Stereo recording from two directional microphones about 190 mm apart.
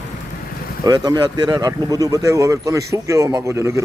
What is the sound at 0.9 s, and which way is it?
Speech, 20° right (ahead or behind).